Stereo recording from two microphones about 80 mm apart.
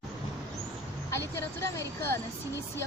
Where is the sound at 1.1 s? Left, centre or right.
Left.